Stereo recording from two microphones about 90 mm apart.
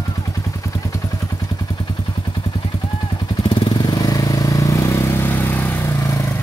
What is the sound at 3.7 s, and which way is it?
Vehicle, 45° left (ahead or behind).